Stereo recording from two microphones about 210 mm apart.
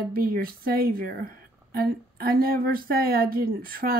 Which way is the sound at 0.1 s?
45° right (ahead or behind).